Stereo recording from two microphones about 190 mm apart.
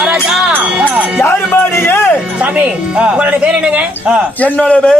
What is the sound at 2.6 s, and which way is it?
A man's voice, 5° right (ahead or behind).